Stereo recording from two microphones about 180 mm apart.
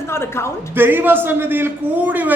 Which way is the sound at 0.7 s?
10° right (ahead or behind).